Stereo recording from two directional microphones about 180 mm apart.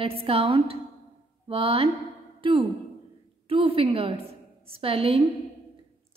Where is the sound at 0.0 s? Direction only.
30° right (ahead or behind).